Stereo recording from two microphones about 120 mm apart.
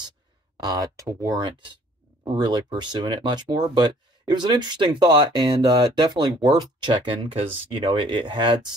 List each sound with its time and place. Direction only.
0.6 s speech: 30° right (ahead or behind)
2.2 s speech: 40° right (ahead or behind)